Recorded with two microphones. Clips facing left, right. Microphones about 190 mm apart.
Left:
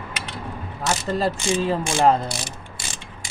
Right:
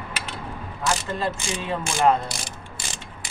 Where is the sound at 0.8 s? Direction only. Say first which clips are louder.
Left 3 dB; 35° left (ahead or behind).